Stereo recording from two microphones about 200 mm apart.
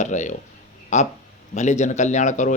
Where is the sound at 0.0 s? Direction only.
35° left (ahead or behind).